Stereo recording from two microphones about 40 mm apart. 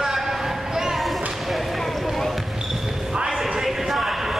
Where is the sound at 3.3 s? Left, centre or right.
Centre.